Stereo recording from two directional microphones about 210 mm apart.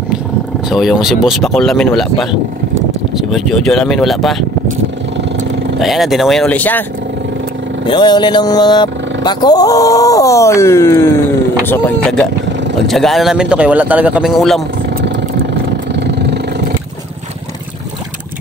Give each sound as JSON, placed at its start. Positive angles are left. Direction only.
{"t": 0.7, "sound": "a man's voice", "side_deg": 0}
{"t": 5.8, "sound": "a man's voice", "side_deg": 0}
{"t": 7.8, "sound": "a man's voice", "side_deg": 20}
{"t": 15.9, "sound": "vehicle", "side_deg": -55}